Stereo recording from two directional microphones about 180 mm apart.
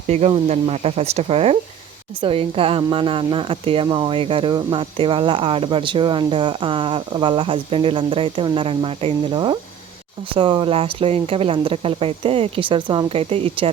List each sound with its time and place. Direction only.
0.1 s speech: 35° right (ahead or behind)